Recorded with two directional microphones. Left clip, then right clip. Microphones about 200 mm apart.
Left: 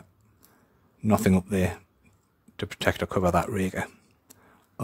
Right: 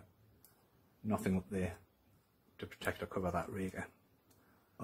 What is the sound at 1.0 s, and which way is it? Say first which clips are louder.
Speech: left 14 dB; 50° left (ahead or behind).